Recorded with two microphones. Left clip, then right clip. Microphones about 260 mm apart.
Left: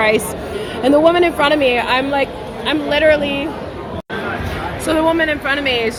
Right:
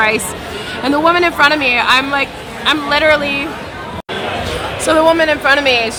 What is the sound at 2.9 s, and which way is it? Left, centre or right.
Speech, right.